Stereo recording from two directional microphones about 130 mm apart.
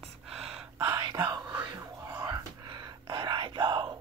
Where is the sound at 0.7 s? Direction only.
25° right (ahead or behind).